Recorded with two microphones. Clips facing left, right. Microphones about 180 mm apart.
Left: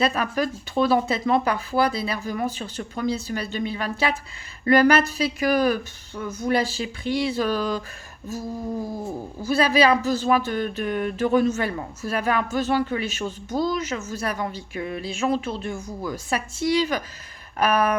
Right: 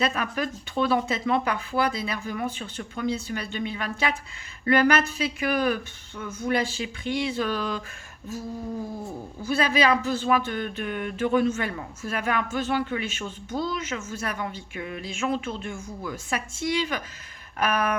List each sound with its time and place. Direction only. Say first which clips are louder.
0.0 s speech: left 4 dB; 35° left (ahead or behind)